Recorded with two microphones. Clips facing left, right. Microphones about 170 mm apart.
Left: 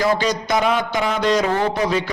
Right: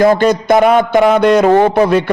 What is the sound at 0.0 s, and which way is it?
A man's voice, 55° right (ahead or behind).